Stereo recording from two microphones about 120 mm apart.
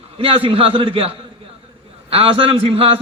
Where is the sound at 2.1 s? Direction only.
50° right (ahead or behind).